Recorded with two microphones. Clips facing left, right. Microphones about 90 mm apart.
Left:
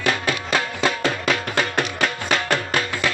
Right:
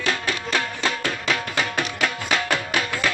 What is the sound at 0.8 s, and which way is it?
Music, 5° left (ahead or behind).